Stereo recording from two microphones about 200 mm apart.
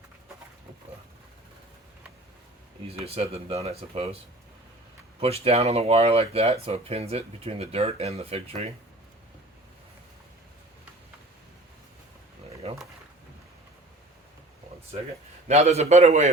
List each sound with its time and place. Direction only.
2.8 s speech: 30° right (ahead or behind)
5.2 s speech: 30° right (ahead or behind)
15.4 s speech: 35° right (ahead or behind)